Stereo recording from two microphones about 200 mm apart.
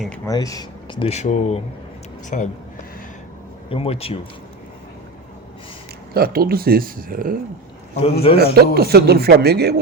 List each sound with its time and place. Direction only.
0.3 s a man's voice: 15° left (ahead or behind); by 2.5 s 40° left (ahead or behind)
3.7 s speech: 30° left (ahead or behind)
6.1 s speech: 50° right (ahead or behind)
8.2 s speech: 30° left (ahead or behind)
8.5 s speech: 50° right (ahead or behind)